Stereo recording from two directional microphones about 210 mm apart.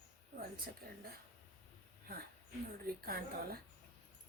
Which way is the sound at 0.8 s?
45° right (ahead or behind).